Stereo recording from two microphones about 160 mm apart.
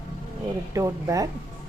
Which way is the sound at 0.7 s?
20° right (ahead or behind).